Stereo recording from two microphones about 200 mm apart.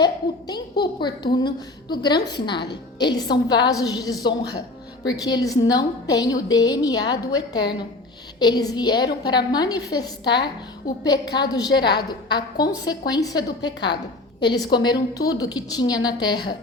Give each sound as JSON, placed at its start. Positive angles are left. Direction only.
{"t": 0.0, "sound": "a child's voice", "side_deg": 20}
{"t": 2.6, "sound": "a woman's voice", "side_deg": 55}
{"t": 3.1, "sound": "a woman's voice", "side_deg": 20}
{"t": 11.7, "sound": "a woman's voice", "side_deg": 55}
{"t": 11.9, "sound": "a woman's voice", "side_deg": 20}